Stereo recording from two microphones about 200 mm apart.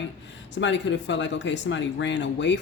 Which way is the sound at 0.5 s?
65° left (ahead or behind).